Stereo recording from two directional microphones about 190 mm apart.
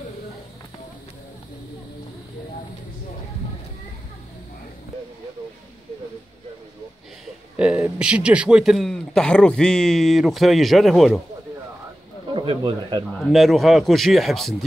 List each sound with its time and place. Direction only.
7.5 s a man's voice: 5° right (ahead or behind)
12.4 s speech: 25° right (ahead or behind)
13.2 s a man's voice: centre (ahead or behind)